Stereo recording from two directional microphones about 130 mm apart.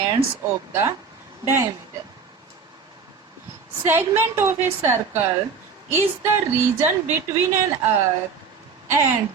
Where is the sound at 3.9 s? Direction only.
15° right (ahead or behind).